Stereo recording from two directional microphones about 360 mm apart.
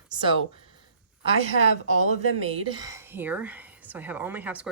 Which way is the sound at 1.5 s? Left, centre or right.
Left.